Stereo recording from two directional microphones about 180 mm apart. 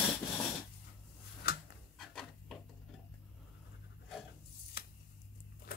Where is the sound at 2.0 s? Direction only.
Centre (ahead or behind).